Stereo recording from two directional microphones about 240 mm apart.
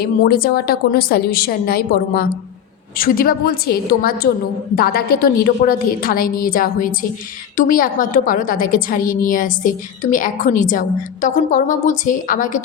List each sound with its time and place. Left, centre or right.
0.0 s a woman's voice: left